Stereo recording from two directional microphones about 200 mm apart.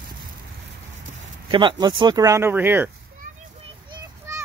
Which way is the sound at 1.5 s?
25° right (ahead or behind).